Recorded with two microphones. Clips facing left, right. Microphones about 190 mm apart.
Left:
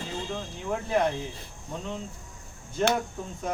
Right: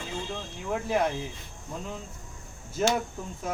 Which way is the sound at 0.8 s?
5° right (ahead or behind).